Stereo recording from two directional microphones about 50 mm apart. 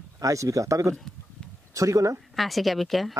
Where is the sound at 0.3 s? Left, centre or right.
Right.